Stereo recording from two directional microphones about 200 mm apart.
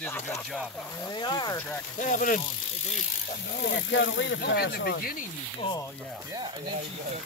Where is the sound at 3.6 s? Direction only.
65° left (ahead or behind).